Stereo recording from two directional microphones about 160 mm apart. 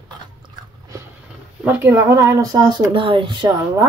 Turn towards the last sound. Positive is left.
turn(degrees=-25)  # may be behind; listen again after turning